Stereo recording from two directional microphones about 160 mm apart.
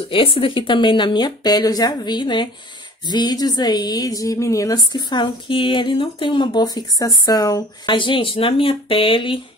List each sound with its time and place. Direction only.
0.1 s a woman's voice: 35° left (ahead or behind)